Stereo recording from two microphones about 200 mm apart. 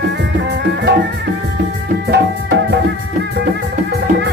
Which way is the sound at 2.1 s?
60° right (ahead or behind).